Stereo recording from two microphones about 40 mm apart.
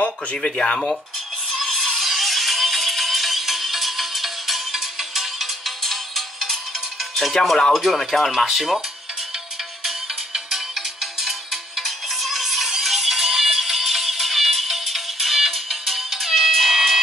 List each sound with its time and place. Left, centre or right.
0.0 s a sound: left
0.5 s speech: centre
1.5 s music: centre
5.8 s music: centre
7.7 s speech: centre
9.8 s music: centre